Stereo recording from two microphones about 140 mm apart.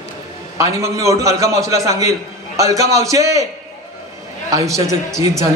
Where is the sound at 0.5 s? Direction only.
20° right (ahead or behind).